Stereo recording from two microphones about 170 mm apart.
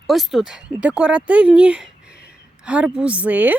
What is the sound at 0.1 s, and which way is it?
Speech, centre (ahead or behind).